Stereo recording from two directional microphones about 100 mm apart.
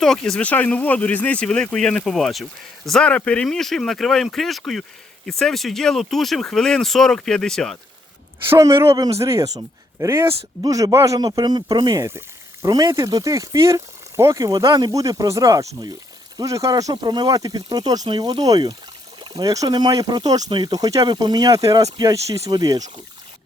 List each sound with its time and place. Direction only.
0.0 s speech: 5° left (ahead or behind)
0.4 s speech: 15° left (ahead or behind)
8.4 s speech: 35° right (ahead or behind)
10.6 s speech: 40° right (ahead or behind)
11.2 s speech: 45° right (ahead or behind)